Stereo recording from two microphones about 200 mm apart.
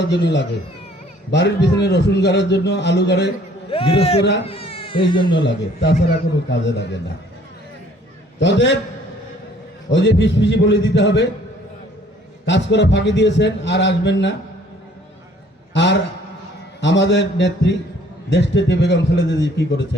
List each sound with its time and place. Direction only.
0.0 s a man's voice: 60° left (ahead or behind)
3.7 s a man's voice: 30° left (ahead or behind)
5.8 s a man's voice: 60° left (ahead or behind)
8.4 s a man's voice: 60° left (ahead or behind)
9.9 s a man's voice: 60° left (ahead or behind)
12.5 s a man's voice: 60° left (ahead or behind)
15.7 s a man's voice: 60° left (ahead or behind)